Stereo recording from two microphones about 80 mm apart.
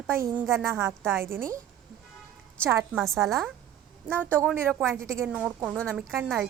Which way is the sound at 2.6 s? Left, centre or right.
Right.